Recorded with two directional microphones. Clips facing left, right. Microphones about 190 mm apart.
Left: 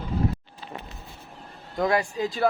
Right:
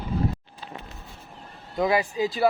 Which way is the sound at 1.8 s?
5° right (ahead or behind).